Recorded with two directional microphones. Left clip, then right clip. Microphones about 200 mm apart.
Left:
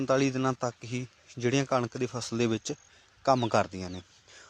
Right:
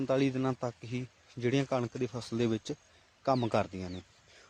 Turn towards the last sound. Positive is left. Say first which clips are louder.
# left 4 dB
turn(degrees=15)  # may be behind; listen again after turning